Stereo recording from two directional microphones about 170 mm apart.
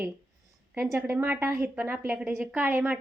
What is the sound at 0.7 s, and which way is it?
Speech, 10° right (ahead or behind).